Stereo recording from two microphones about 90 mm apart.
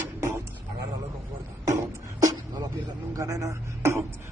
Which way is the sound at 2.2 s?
45° right (ahead or behind).